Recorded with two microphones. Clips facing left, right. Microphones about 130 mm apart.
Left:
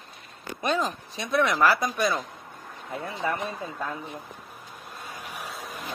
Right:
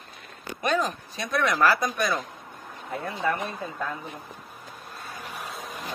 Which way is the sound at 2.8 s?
Centre (ahead or behind).